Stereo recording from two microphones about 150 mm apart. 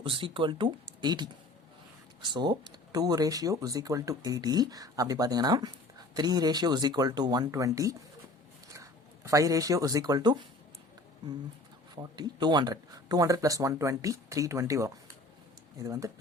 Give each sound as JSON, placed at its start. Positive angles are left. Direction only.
{"t": 0.0, "sound": "speech", "side_deg": -35}
{"t": 2.3, "sound": "speech", "side_deg": -30}
{"t": 11.9, "sound": "speech", "side_deg": -30}